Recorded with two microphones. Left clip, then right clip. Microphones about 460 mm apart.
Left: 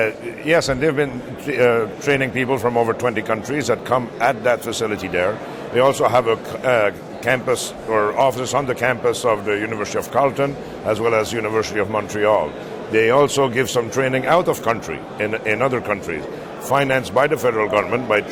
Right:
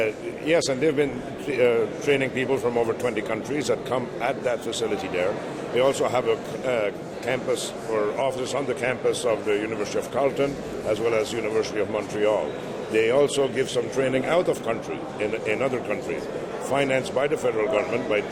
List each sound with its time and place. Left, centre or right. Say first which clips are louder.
0.0 s speech: left 5 dB; left